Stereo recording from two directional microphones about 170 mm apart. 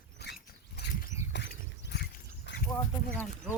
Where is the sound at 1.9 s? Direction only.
80° left.